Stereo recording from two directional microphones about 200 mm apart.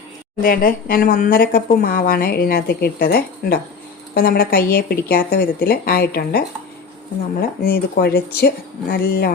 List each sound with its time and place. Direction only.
0.4 s speech: 45° left (ahead or behind)